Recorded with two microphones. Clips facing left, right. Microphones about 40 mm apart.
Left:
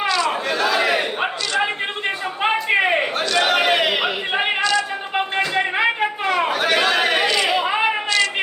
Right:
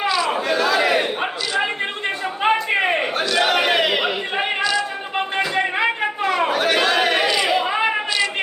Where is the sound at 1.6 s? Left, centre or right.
Centre.